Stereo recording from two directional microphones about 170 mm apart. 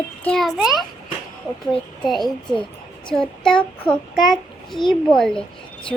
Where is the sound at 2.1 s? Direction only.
Centre (ahead or behind).